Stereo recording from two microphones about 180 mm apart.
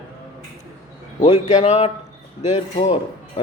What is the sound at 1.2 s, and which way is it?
A man's voice, 35° left (ahead or behind).